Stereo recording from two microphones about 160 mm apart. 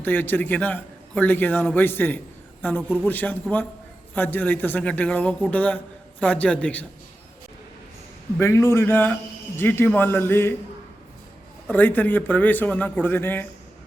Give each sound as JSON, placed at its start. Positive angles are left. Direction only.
{"t": 0.0, "sound": "a man's voice", "side_deg": 10}
{"t": 8.4, "sound": "a man's voice", "side_deg": 15}
{"t": 11.7, "sound": "a man's voice", "side_deg": 10}